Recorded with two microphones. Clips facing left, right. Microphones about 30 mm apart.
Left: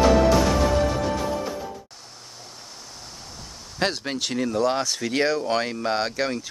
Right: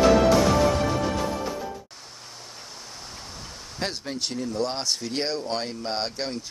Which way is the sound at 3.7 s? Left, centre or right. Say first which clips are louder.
Left 6 dB; left.